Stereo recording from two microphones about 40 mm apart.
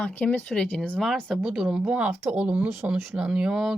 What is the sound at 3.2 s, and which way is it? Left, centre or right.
Speech, right.